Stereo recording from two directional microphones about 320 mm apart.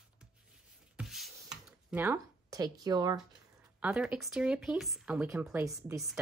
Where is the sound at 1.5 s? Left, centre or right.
Centre.